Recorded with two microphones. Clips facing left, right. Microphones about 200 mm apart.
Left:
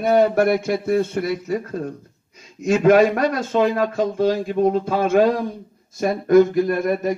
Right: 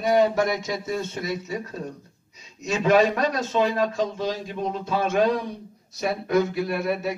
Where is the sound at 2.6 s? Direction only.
55° left (ahead or behind).